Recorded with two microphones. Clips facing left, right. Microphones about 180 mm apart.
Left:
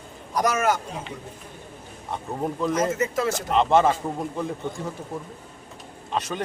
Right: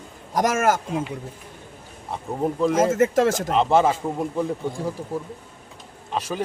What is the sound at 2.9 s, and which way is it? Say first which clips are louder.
Speech: right 6 dB; 50° right (ahead or behind).